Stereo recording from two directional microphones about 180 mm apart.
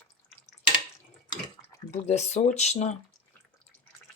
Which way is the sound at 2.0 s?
40° left (ahead or behind).